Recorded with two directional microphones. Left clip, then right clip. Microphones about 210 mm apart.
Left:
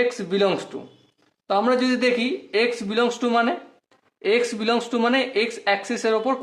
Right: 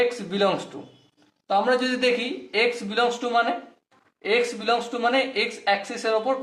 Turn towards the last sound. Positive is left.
turn(degrees=40)  # may be behind; listen again after turning